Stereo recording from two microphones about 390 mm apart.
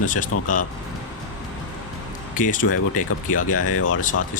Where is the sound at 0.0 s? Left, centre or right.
Centre.